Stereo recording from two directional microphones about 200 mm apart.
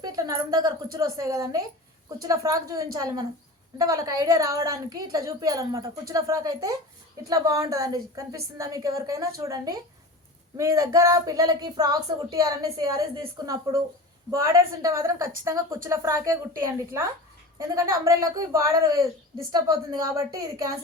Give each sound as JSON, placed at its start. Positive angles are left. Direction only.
{"t": 0.0, "sound": "a woman's voice", "side_deg": -15}